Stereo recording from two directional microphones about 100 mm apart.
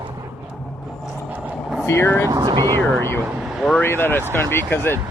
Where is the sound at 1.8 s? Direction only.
25° left (ahead or behind).